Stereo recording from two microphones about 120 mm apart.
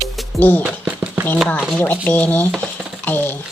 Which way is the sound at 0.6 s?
10° right (ahead or behind).